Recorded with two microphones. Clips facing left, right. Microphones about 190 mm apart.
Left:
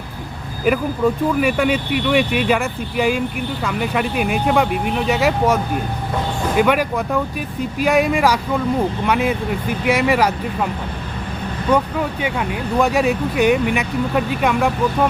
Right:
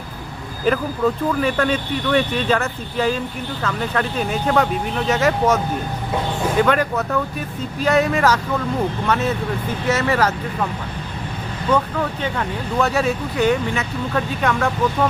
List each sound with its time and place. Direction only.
0.7 s speech: 10° left (ahead or behind)
6.6 s speech: 10° left (ahead or behind)
11.7 s speech: 10° left (ahead or behind)